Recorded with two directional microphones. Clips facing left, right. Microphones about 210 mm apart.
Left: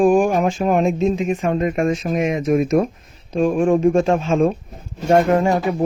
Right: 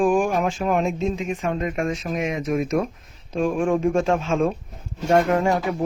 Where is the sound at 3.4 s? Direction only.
35° left (ahead or behind).